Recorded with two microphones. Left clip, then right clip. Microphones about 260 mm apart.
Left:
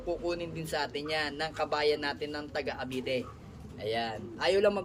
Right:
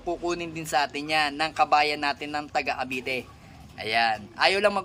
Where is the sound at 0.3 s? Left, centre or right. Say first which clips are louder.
Right 5 dB; centre.